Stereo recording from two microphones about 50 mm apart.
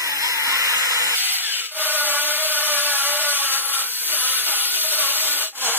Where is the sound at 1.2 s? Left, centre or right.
Right.